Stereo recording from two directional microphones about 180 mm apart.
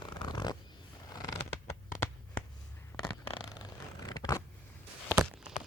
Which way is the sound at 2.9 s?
20° left (ahead or behind).